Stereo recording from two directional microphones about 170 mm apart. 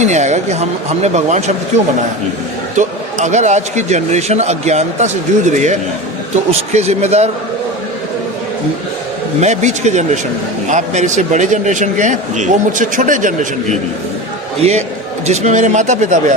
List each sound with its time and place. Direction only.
0.0 s a man's voice: 45° right (ahead or behind)
9.4 s a man's voice: 45° right (ahead or behind)
14.6 s a man's voice: 40° right (ahead or behind)